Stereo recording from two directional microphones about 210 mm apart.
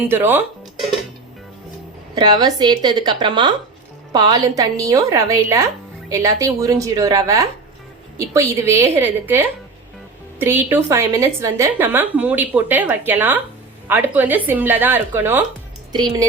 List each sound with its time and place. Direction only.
0.0 s a woman's voice: 10° right (ahead or behind)
2.1 s a woman's voice: 20° right (ahead or behind)